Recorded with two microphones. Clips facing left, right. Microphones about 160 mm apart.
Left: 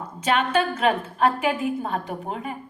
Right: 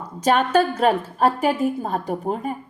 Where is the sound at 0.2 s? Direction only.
40° right (ahead or behind).